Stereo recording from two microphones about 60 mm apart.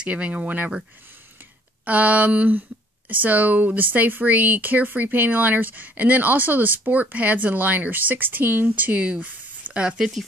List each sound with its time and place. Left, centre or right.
0.0 s speech: centre
1.9 s speech: right; by 10.2 s centre